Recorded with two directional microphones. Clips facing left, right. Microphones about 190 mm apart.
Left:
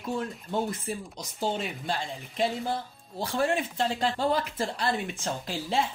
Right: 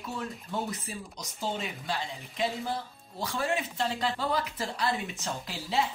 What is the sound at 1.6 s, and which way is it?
A woman's voice, 55° left (ahead or behind).